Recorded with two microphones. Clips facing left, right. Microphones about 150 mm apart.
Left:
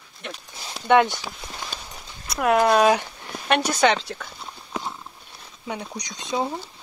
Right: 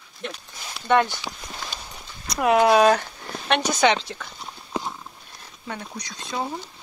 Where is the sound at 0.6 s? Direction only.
35° left (ahead or behind).